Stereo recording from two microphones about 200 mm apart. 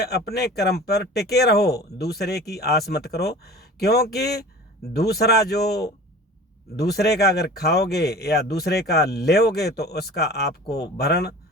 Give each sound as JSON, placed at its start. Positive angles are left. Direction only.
{"t": 0.0, "sound": "speech", "side_deg": 50}